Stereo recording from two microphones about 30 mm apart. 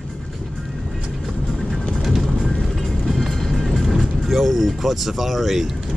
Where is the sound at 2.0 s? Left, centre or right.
Centre.